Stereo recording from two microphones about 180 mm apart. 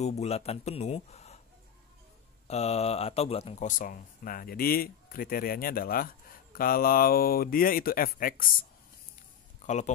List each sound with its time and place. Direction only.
0.0 s speech: 35° left (ahead or behind)
2.4 s speech: 35° left (ahead or behind)
9.7 s speech: 40° left (ahead or behind)